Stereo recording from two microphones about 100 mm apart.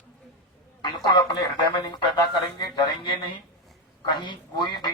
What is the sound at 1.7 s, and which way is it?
Speech, 50° left (ahead or behind).